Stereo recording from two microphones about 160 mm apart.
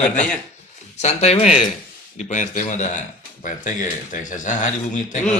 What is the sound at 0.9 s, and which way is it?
Speech, 40° left (ahead or behind).